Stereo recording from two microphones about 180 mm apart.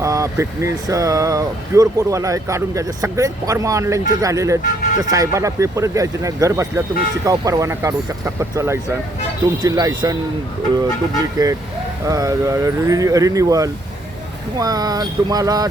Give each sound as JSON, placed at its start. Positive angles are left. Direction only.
{"t": 0.0, "sound": "speech", "side_deg": -15}
{"t": 11.4, "sound": "speech", "side_deg": -20}